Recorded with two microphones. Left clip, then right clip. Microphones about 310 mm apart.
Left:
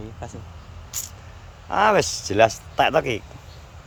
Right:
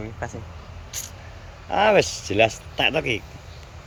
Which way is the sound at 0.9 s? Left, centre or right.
Centre.